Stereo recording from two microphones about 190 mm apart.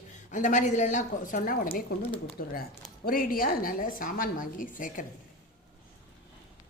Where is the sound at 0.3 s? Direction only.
40° left (ahead or behind).